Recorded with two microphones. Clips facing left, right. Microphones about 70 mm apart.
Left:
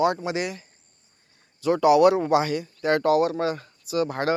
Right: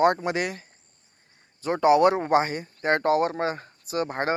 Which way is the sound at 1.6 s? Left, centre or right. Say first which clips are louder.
Left 2 dB; right.